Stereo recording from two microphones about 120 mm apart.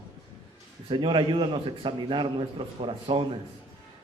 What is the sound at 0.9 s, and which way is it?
A man's voice, 40° right (ahead or behind).